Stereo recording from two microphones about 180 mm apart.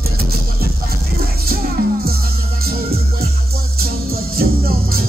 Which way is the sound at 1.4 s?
55° right (ahead or behind).